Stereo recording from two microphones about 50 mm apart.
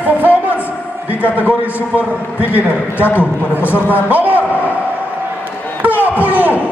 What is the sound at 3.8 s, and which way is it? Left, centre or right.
Speech, right.